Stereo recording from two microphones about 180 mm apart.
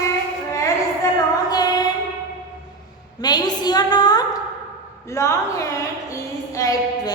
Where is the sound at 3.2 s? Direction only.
25° left (ahead or behind).